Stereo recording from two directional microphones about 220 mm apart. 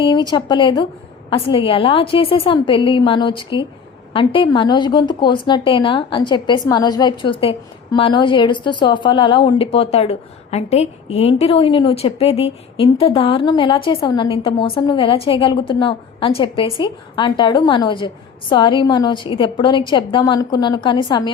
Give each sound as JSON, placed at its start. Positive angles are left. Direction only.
{"t": 0.0, "sound": "speech", "side_deg": 20}